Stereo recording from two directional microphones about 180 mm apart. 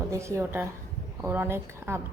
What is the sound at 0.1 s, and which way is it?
A woman's voice, 15° right (ahead or behind).